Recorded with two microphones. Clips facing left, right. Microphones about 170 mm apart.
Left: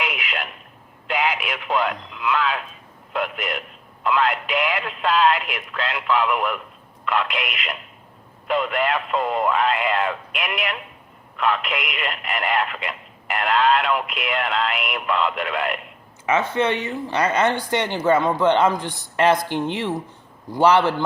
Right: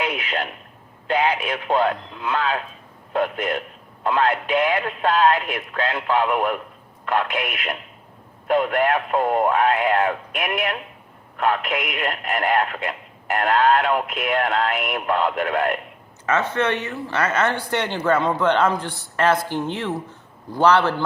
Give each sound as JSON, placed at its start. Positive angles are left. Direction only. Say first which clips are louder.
{"t": 0.0, "sound": "a sound", "louder": "right 3 dB", "side_deg": -40}
{"t": 1.4, "sound": "speech", "louder": "right 3 dB", "side_deg": -45}
{"t": 16.2, "sound": "a man's voice", "louder": "left 1 dB", "side_deg": 10}